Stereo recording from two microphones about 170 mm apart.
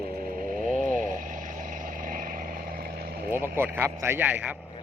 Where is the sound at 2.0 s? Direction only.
55° right (ahead or behind).